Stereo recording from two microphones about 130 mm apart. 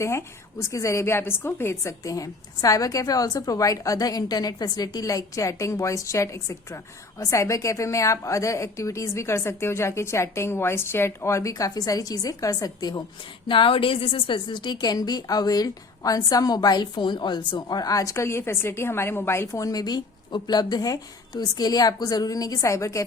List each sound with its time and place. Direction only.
0.0 s a woman's voice: 20° left (ahead or behind)
13.5 s a woman's voice: 40° left (ahead or behind); by 23.0 s 25° left (ahead or behind)